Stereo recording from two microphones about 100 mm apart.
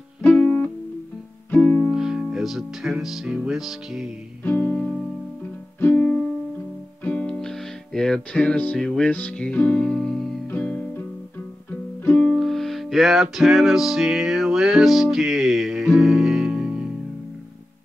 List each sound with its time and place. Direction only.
0.2 s music: 15° left (ahead or behind)
1.9 s music: 5° right (ahead or behind)
4.5 s music: 15° left (ahead or behind)
4.7 s music: 5° left (ahead or behind)
5.8 s music: 20° left (ahead or behind)
12.0 s music: 20° left (ahead or behind)
12.4 s music: 5° left (ahead or behind)